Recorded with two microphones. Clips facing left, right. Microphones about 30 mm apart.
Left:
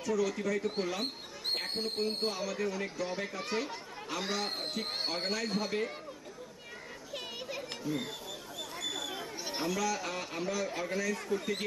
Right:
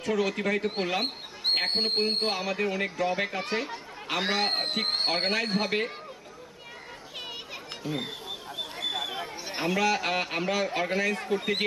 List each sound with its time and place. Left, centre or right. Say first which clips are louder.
0.0 s speech: right 4 dB; right
4.1 s speech: right 8 dB; right
7.8 s a sound: right 5 dB; right
9.6 s speech: right 8 dB; right